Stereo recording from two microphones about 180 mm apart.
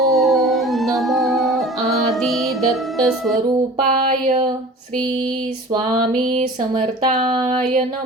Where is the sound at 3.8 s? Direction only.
50° right (ahead or behind).